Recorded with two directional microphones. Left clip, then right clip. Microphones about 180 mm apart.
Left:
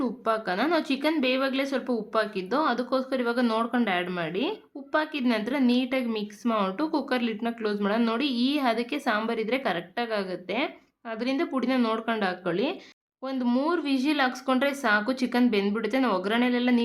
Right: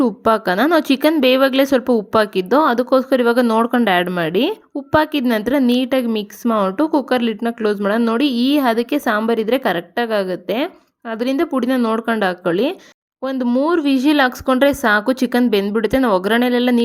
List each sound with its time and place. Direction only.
0.0 s a woman's voice: 55° right (ahead or behind)